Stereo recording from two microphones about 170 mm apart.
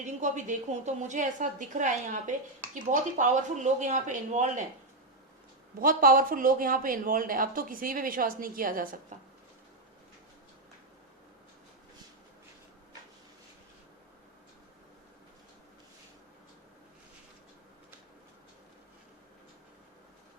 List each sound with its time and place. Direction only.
0.0 s a woman's voice: 45° right (ahead or behind)
5.8 s speech: 55° right (ahead or behind)